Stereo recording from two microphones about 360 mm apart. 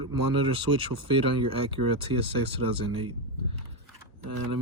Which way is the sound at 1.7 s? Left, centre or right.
Right.